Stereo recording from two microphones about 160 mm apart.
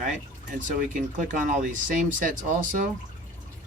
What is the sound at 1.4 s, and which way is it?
Speech, 55° right (ahead or behind).